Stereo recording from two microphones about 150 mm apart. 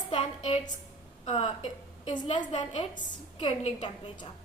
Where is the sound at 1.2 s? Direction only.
45° left (ahead or behind).